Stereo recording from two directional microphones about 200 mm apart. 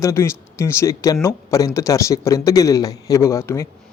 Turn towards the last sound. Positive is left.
turn(degrees=15)  # may be behind; listen again after turning